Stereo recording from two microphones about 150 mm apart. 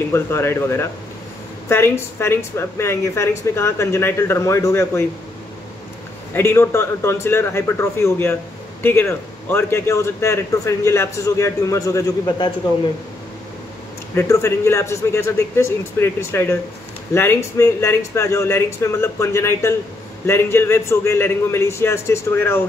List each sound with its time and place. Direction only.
0.1 s speech: 15° left (ahead or behind)
6.3 s a man's voice: 15° left (ahead or behind)
14.1 s speech: 20° left (ahead or behind)